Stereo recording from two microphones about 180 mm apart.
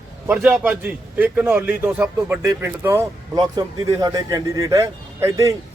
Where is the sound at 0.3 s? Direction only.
10° right (ahead or behind).